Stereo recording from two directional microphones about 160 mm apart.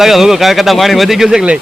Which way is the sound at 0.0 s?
Centre (ahead or behind).